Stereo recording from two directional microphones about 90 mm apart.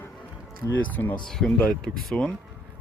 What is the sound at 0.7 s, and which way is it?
Speech, 20° left (ahead or behind).